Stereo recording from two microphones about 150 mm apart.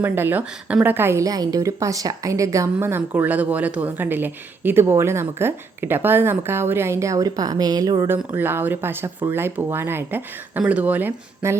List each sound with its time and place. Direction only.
0.0 s a woman's voice: 15° right (ahead or behind)